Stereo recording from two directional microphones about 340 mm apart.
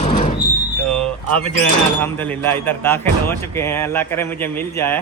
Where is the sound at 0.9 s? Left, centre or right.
Centre.